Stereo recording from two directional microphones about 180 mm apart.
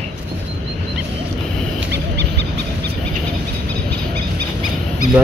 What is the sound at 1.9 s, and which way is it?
Dog, 75° right (ahead or behind).